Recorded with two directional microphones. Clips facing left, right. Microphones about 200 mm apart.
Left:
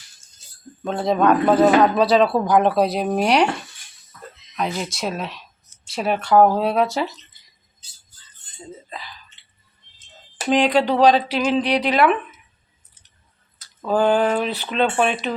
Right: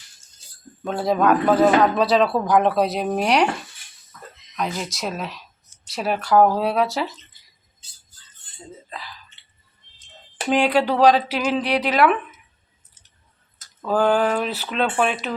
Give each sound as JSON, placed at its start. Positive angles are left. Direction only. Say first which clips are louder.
{"t": 0.9, "sound": "speech", "louder": "left 1 dB", "side_deg": -5}
{"t": 4.5, "sound": "speech", "louder": "left 2 dB", "side_deg": 0}
{"t": 10.5, "sound": "speech", "louder": "left 1 dB", "side_deg": -10}
{"t": 13.8, "sound": "speech", "louder": "left 1 dB", "side_deg": -5}